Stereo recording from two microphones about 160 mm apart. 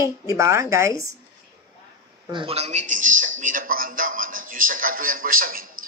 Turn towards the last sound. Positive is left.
turn(degrees=-60)  # may be behind; listen again after turning